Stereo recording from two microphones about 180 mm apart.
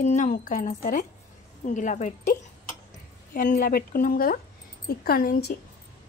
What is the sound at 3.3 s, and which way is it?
A woman's voice, 50° left (ahead or behind).